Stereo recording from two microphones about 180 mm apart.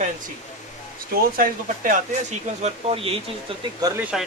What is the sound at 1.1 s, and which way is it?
Speech, 55° right (ahead or behind).